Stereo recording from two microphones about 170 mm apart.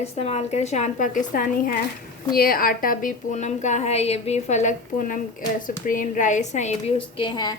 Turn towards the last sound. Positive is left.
turn(degrees=25)  # may be behind; listen again after turning